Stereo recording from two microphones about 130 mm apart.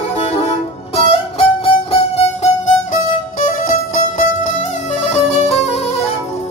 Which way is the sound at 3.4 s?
90° left.